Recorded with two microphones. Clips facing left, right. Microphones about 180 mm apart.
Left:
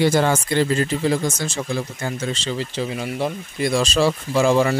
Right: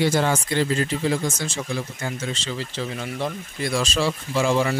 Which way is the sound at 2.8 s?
10° left (ahead or behind).